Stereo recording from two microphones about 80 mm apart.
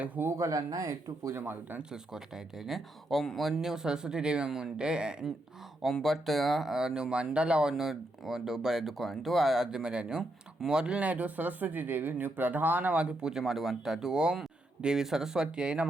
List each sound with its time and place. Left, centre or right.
0.0 s speech: right
0.3 s speech: right
1.9 s speech: centre
5.8 s speech: centre